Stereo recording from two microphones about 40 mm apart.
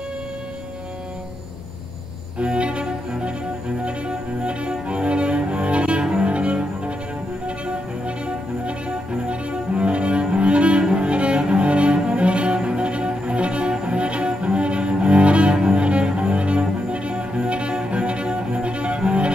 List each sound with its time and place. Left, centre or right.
2.4 s cello: right
8.6 s cello: right